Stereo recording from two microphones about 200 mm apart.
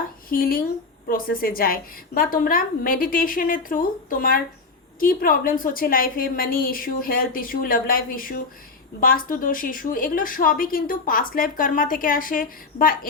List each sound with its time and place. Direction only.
0.3 s a woman's voice: 45° left (ahead or behind)